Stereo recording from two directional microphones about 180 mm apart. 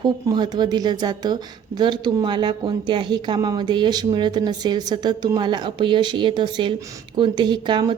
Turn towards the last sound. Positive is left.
turn(degrees=-25)  # may be behind; listen again after turning